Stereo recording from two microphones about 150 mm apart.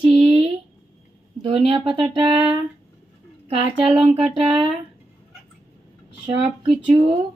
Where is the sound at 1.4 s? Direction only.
35° right (ahead or behind).